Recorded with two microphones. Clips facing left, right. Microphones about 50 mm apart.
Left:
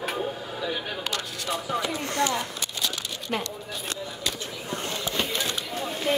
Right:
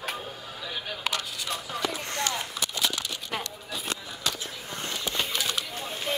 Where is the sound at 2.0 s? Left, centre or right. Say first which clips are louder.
Left 5 dB; left.